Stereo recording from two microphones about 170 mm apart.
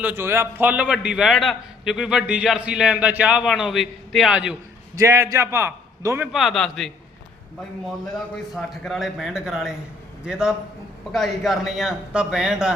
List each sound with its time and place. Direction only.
0.0 s a man's voice: 15° right (ahead or behind)
4.9 s a man's voice: 15° right (ahead or behind)
6.3 s a man's voice: centre (ahead or behind)
8.5 s a man's voice: centre (ahead or behind)